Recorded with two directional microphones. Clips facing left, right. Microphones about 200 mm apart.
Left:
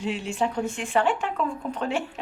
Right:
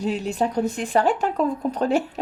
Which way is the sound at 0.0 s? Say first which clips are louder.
Right 3 dB; 40° right (ahead or behind).